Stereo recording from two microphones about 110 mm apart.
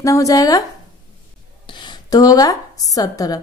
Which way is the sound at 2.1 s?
35° left (ahead or behind).